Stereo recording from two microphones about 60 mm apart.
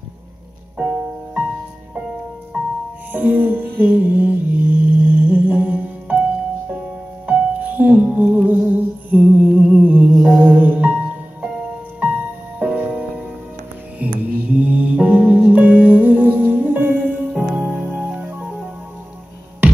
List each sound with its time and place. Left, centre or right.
0.7 s music: right
2.5 s music: centre
3.1 s music: right
7.2 s music: right
12.5 s music: right
14.2 s music: right